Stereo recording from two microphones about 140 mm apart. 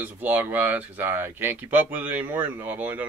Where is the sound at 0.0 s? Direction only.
10° right (ahead or behind).